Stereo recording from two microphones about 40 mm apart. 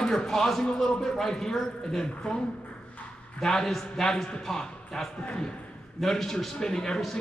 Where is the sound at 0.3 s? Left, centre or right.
Centre.